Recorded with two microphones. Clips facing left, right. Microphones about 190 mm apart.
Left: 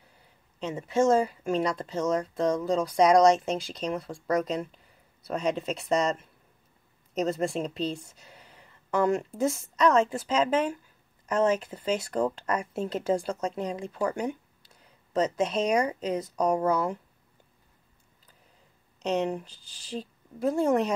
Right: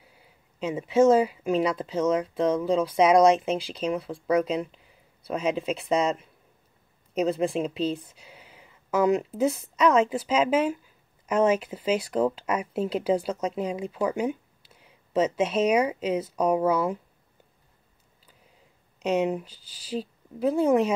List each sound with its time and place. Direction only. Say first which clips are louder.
0.0 s a woman's voice: right 3 dB; 5° right (ahead or behind)
19.0 s speech: right 3 dB; 5° right (ahead or behind)